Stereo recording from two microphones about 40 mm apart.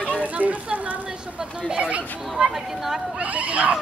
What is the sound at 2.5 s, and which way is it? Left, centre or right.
Speech, centre.